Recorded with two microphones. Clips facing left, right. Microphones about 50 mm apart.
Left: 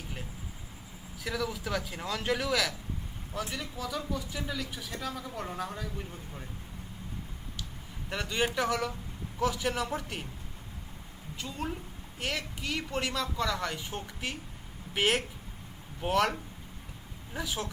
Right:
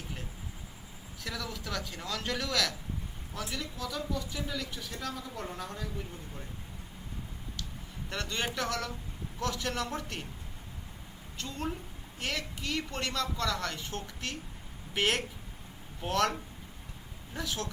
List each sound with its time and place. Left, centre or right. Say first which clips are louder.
1.2 s speech: left 5 dB; centre
8.1 s speech: left 4 dB; centre
11.3 s a woman's voice: even; centre